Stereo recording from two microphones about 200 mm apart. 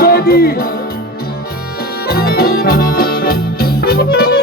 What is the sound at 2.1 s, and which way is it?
Music, 50° left (ahead or behind).